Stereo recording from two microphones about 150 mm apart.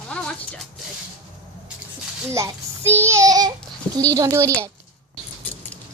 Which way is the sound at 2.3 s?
20° right (ahead or behind).